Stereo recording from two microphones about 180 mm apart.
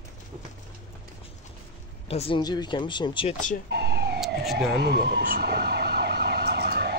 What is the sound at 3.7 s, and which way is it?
Police car, 65° right (ahead or behind).